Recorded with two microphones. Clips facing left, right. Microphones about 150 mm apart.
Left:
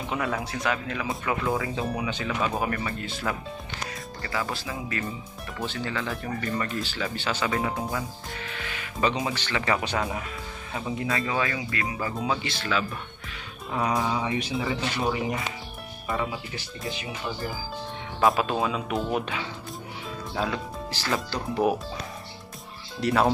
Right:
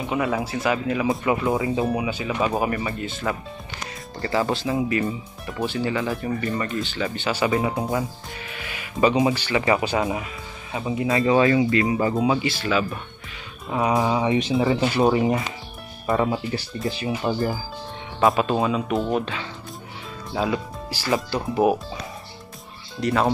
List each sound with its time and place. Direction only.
0.0 s speech: 5° right (ahead or behind)
1.0 s speech: 20° right (ahead or behind)
1.9 s speech: 10° right (ahead or behind)
4.2 s speech: 30° right (ahead or behind); by 8.0 s 15° right (ahead or behind)
8.5 s music: 10° right (ahead or behind)
9.2 s speech: 10° right (ahead or behind)
11.1 s speech: 25° right (ahead or behind)
12.2 s speech: 5° right (ahead or behind)
13.9 s speech: 20° right (ahead or behind)
14.6 s speech: 40° right (ahead or behind)
17.3 s speech: 50° right (ahead or behind)
18.2 s speech: centre (ahead or behind)
20.3 s speech: 5° right (ahead or behind)
22.9 s speech: 5° left (ahead or behind)